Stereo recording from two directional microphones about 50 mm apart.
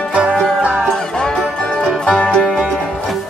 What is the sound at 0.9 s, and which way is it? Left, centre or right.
Music, centre.